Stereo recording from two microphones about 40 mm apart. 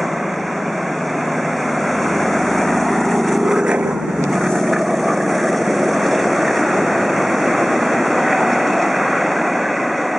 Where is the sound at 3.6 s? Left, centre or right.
Centre.